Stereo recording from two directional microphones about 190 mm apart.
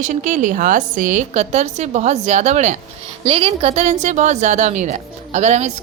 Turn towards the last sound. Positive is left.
turn(degrees=-35)  # may be behind; listen again after turning